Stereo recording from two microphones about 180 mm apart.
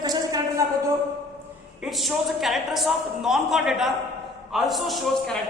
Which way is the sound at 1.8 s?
Centre (ahead or behind).